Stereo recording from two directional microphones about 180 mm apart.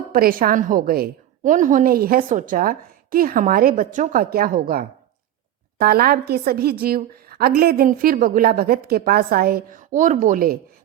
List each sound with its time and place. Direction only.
0.1 s a woman's voice: 50° right (ahead or behind)